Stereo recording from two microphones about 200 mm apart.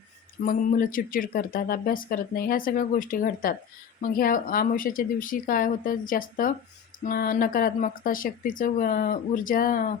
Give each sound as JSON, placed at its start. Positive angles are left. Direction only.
{"t": 0.4, "sound": "speech", "side_deg": 45}